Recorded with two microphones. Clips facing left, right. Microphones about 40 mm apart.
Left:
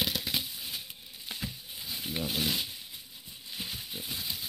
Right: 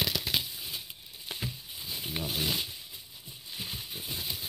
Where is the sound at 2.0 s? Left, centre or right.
Centre.